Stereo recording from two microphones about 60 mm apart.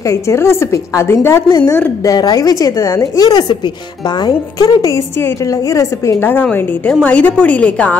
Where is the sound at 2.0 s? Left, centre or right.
Left.